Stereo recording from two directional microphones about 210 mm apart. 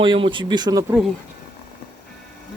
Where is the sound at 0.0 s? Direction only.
25° right (ahead or behind).